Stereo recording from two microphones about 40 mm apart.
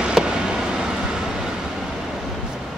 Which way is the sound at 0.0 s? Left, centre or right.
Centre.